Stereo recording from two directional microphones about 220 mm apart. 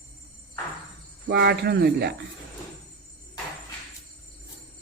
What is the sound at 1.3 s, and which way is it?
Speech, 45° right (ahead or behind).